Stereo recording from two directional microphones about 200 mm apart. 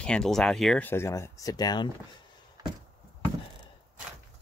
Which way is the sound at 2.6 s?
20° right (ahead or behind).